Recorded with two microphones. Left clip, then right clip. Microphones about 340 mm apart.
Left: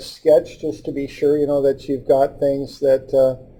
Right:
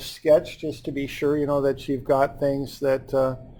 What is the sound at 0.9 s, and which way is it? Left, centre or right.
Speech, right.